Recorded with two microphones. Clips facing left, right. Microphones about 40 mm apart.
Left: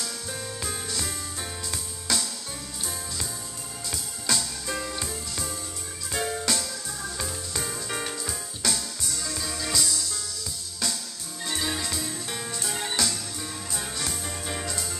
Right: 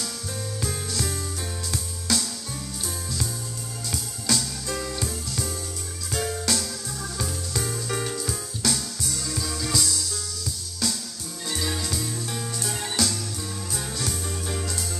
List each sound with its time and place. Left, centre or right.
0.0 s music: centre
3.9 s music: centre
11.4 s music: centre